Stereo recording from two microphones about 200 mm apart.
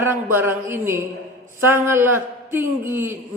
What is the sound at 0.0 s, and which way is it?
A man's voice, 10° right (ahead or behind).